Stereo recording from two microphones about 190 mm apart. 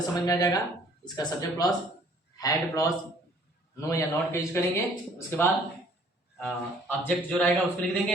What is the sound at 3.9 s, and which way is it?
A man's voice, 15° left (ahead or behind).